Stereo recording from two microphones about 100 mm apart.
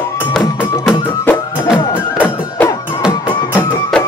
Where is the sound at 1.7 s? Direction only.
50° left (ahead or behind).